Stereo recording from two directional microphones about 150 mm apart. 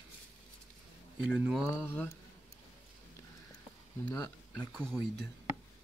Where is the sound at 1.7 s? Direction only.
15° left (ahead or behind).